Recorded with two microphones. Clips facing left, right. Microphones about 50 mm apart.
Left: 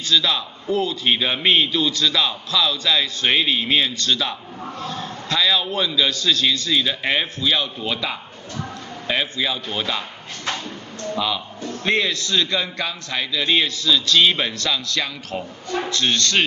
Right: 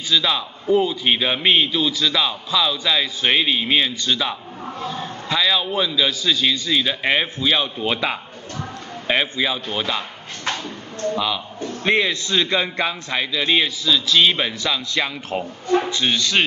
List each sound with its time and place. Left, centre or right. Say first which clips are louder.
0.1 s a man's voice: even; centre
11.1 s a man's voice: right 1 dB; centre